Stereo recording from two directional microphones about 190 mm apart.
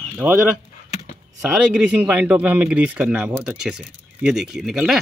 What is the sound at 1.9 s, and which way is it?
Speech, 10° right (ahead or behind).